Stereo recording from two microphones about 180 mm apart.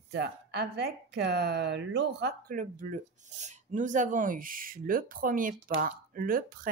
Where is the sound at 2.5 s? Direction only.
45° right (ahead or behind).